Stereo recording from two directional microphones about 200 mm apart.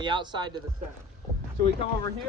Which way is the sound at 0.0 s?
25° right (ahead or behind).